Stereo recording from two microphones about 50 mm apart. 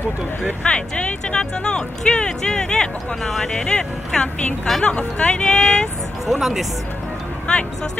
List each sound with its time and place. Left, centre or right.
0.7 s speech: left
6.2 s speech: centre
7.5 s speech: centre